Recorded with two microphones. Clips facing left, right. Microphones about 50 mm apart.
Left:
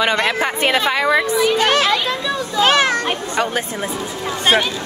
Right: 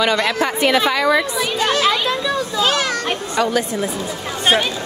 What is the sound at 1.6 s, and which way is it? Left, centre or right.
Speech, left.